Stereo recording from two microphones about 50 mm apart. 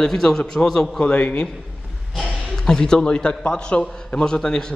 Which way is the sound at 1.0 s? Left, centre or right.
Left.